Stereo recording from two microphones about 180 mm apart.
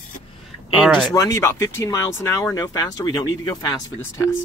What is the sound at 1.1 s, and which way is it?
Speech, 15° left (ahead or behind).